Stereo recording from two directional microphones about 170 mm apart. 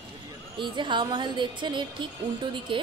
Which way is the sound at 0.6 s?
30° right (ahead or behind).